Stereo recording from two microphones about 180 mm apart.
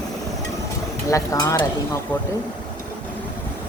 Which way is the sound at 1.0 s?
15° left (ahead or behind).